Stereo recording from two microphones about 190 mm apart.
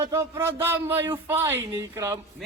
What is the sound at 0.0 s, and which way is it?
Speech, 15° right (ahead or behind).